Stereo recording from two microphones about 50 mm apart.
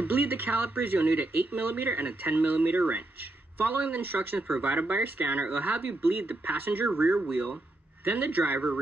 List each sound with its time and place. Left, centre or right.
0.0 s speech: right
4.4 s speech: right